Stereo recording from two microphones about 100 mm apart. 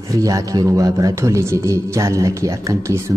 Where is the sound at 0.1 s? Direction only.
35° right (ahead or behind).